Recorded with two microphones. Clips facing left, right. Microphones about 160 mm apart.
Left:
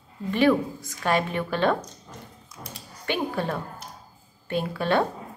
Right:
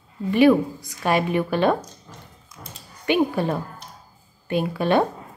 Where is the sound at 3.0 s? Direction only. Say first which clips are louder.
Right 7 dB; 15° right (ahead or behind).